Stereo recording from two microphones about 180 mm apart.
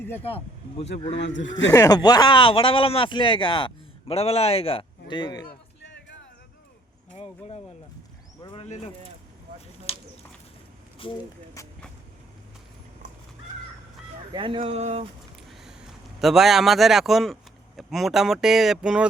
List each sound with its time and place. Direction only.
0.2 s a man's voice: 35° left (ahead or behind)
1.2 s speech: 85° left
1.7 s a man's voice: 20° left (ahead or behind)
5.8 s music: 80° left
7.2 s speech: 35° left (ahead or behind)
8.4 s a sound: 25° left (ahead or behind)
11.0 s speech: 30° left (ahead or behind)
11.6 s speech: 15° left (ahead or behind)
14.3 s speech: 30° right (ahead or behind)
16.2 s speech: centre (ahead or behind)